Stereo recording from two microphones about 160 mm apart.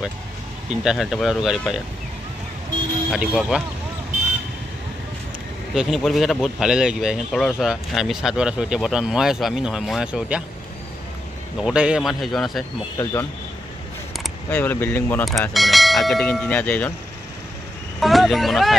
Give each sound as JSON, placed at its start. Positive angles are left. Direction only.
{"t": 0.7, "sound": "speech", "side_deg": -5}
{"t": 3.1, "sound": "speech", "side_deg": -5}
{"t": 5.8, "sound": "speech", "side_deg": 0}
{"t": 11.6, "sound": "speech", "side_deg": -5}
{"t": 12.9, "sound": "speech", "side_deg": 20}
{"t": 15.5, "sound": "speech", "side_deg": 0}
{"t": 18.0, "sound": "speech", "side_deg": 0}